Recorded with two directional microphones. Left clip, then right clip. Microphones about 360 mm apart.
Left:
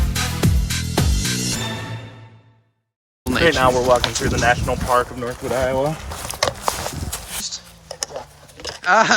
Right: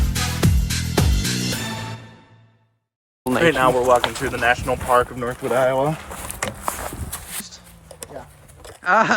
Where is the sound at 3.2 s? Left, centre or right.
Centre.